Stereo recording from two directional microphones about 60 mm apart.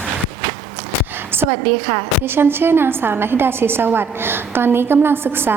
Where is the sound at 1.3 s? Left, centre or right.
Right.